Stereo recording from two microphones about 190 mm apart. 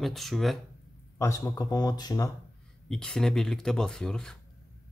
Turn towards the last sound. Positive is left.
turn(degrees=5)  # may be behind; listen again after turning